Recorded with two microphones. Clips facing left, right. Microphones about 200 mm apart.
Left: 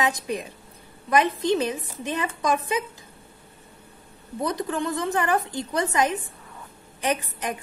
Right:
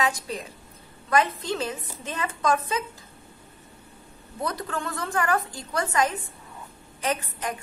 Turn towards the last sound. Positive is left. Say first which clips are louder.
# left 2 dB
turn(degrees=20)  # may be behind; listen again after turning